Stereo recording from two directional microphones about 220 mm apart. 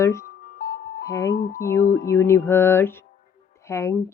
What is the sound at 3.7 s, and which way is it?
Speech, 15° left (ahead or behind).